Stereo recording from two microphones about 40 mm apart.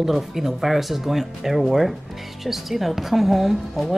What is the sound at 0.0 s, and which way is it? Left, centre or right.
A woman's voice, centre.